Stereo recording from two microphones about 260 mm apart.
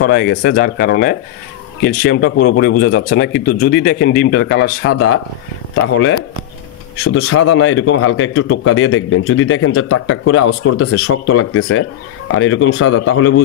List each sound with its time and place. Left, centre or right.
0.0 s speech: left
4.9 s speech: left
5.9 s a man's voice: left